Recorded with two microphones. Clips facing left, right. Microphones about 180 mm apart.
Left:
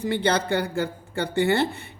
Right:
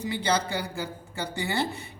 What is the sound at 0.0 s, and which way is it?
A woman's voice, 55° left (ahead or behind).